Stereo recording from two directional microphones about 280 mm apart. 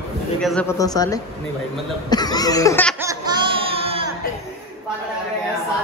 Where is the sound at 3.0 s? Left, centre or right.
Centre.